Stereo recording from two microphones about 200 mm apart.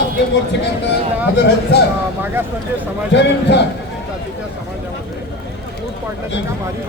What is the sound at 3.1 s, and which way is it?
Speech, 60° left (ahead or behind).